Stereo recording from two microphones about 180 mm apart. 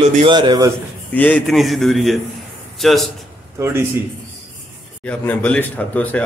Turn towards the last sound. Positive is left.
turn(degrees=10)  # may be behind; listen again after turning